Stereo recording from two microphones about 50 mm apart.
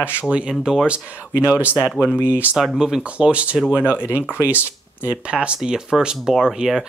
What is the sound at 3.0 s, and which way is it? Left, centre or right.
Speech, right.